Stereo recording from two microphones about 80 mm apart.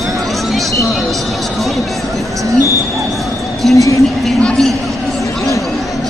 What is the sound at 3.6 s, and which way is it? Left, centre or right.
Speech, centre.